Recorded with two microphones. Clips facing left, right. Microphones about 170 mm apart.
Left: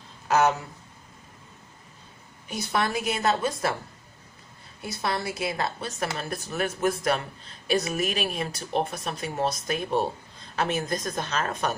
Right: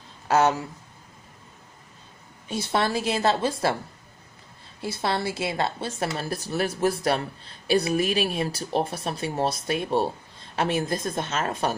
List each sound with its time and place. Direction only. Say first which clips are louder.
0.3 s speech: right 1 dB; 30° right (ahead or behind)
2.4 s a woman's voice: right 2 dB; 30° right (ahead or behind)
4.8 s a woman's voice: right 3 dB; 30° right (ahead or behind)